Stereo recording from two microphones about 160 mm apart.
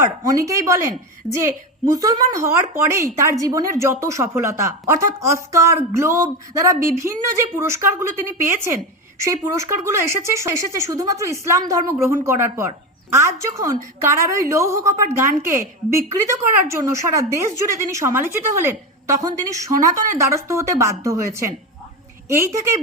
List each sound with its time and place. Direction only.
0.4 s speech: 20° right (ahead or behind)